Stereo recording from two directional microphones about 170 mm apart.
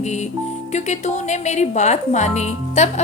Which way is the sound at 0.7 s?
45° left (ahead or behind).